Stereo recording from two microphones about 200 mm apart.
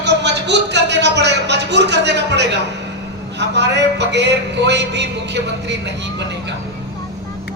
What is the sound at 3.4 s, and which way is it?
A man's voice, 60° right (ahead or behind).